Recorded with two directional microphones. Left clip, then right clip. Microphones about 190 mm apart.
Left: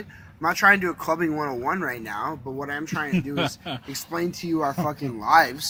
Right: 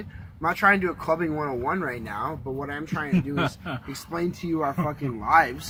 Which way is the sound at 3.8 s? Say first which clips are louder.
Left 2 dB; 40° left (ahead or behind).